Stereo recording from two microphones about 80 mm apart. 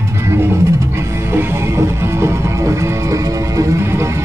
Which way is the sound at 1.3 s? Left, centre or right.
Right.